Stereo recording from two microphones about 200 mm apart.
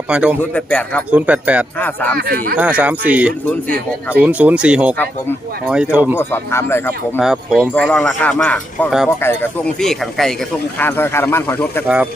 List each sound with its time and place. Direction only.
0.1 s speech: 5° right (ahead or behind)
0.5 s speech: 5° left (ahead or behind)
1.1 s speech: 5° right (ahead or behind)
1.8 s speech: 10° left (ahead or behind)
2.1 s speech: 50° right (ahead or behind)
2.6 s speech: 5° right (ahead or behind)
6.1 s speech: 10° left (ahead or behind)
7.2 s speech: centre (ahead or behind)